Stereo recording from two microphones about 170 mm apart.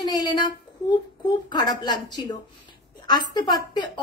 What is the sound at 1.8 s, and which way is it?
Speech, 25° left (ahead or behind).